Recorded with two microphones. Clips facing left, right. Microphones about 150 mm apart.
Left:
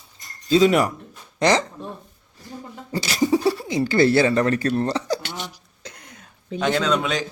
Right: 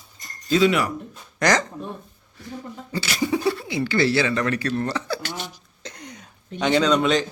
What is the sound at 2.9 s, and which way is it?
Speech, 35° left (ahead or behind).